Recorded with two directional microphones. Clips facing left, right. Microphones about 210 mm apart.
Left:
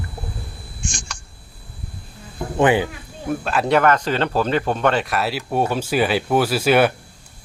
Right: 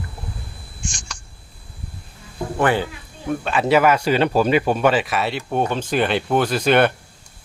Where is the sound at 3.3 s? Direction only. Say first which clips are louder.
Right 1 dB; centre (ahead or behind).